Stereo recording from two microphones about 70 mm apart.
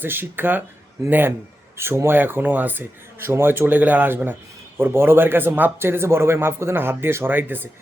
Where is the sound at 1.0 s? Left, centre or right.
Right.